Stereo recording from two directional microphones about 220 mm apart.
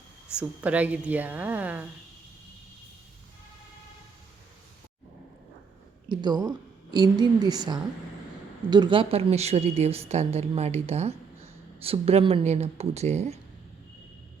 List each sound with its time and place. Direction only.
0.3 s a woman's voice: 5° right (ahead or behind)
6.1 s speech: 20° right (ahead or behind)